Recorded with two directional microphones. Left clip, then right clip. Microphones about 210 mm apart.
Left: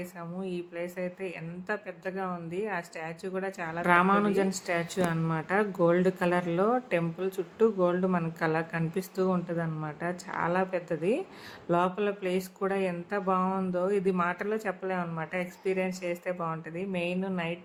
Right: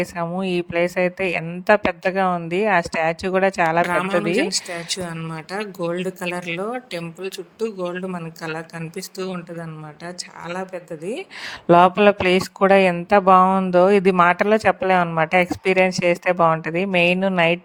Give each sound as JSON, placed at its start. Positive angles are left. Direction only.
{"t": 0.0, "sound": "speech", "side_deg": -45}
{"t": 4.9, "sound": "speech", "side_deg": 0}
{"t": 7.6, "sound": "speech", "side_deg": 0}
{"t": 9.0, "sound": "speech", "side_deg": -45}
{"t": 10.4, "sound": "speech", "side_deg": 0}
{"t": 11.7, "sound": "speech", "side_deg": -45}